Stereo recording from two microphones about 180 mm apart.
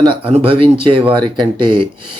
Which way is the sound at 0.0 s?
30° right (ahead or behind).